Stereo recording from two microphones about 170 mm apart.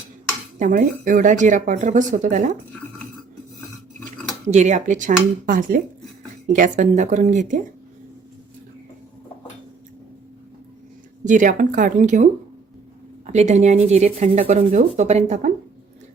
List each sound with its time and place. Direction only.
0.6 s speech: 55° right (ahead or behind)
4.4 s speech: 45° right (ahead or behind)
11.3 s speech: 50° right (ahead or behind)